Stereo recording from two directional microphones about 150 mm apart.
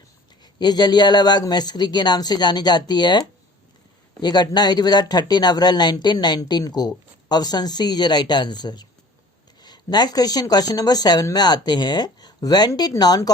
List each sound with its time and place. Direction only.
0.4 s speech: 25° left (ahead or behind)